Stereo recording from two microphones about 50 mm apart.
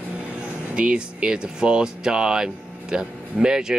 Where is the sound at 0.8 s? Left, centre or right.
Right.